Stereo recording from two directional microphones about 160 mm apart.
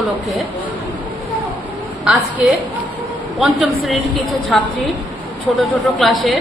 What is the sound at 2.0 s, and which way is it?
A woman's voice, 5° right (ahead or behind).